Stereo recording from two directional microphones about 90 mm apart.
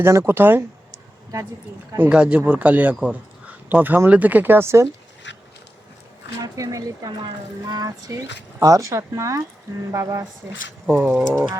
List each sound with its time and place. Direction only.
0.0 s speech: 30° right (ahead or behind)
2.0 s speech: 10° right (ahead or behind); by 4.9 s 30° right (ahead or behind)
6.4 s speech: 40° right (ahead or behind)
7.7 s a sound: 45° right (ahead or behind)
8.5 s speech: 40° right (ahead or behind)
11.1 s speech: 10° left (ahead or behind)